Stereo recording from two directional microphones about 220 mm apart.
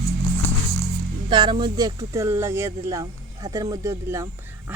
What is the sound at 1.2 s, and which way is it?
Speech, 20° right (ahead or behind).